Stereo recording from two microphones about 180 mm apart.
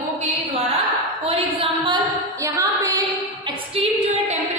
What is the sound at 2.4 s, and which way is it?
Female singing, 15° right (ahead or behind).